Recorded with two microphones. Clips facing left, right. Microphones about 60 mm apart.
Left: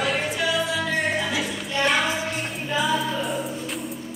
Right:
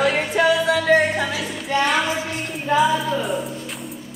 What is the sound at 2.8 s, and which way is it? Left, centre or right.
Speech, centre.